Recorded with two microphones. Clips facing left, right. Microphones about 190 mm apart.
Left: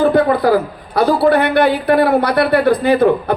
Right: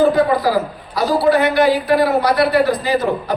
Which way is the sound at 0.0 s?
60° left (ahead or behind).